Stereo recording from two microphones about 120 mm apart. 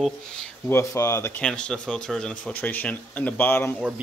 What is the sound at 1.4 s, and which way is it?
Speech, 10° left (ahead or behind).